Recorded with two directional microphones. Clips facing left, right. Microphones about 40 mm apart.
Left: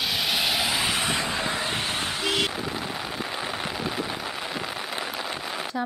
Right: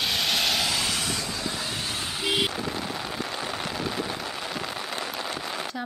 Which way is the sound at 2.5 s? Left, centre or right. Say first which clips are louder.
Even; centre.